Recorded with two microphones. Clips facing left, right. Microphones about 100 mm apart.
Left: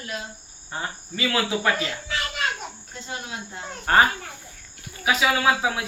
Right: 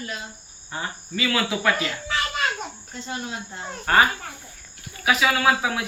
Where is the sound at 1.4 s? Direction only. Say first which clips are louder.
Right 1 dB; 30° left (ahead or behind).